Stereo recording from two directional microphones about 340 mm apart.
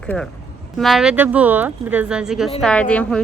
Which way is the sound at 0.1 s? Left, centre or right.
Centre.